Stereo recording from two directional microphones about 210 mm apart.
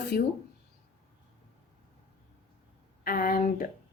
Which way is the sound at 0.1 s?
50° left (ahead or behind).